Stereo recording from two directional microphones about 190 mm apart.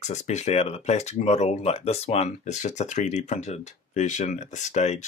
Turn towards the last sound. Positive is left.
turn(degrees=35)  # may be behind; listen again after turning